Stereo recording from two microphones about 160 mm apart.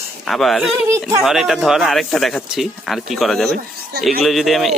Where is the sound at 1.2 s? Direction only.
Centre (ahead or behind).